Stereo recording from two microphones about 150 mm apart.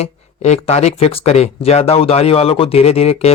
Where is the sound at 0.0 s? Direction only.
45° left (ahead or behind).